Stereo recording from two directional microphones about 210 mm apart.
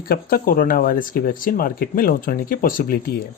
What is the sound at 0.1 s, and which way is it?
Speech, 45° left (ahead or behind).